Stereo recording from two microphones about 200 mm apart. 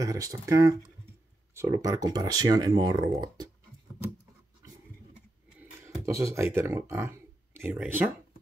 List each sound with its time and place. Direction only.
0.0 s speech: 15° right (ahead or behind)
6.0 s speech: 15° right (ahead or behind)